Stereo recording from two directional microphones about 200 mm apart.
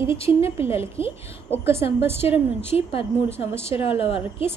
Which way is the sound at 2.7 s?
30° left (ahead or behind).